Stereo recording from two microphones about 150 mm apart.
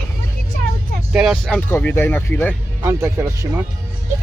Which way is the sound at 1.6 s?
15° left (ahead or behind).